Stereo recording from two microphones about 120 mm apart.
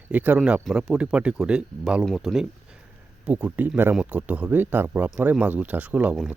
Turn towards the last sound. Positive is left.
turn(degrees=-10)  # may be behind; listen again after turning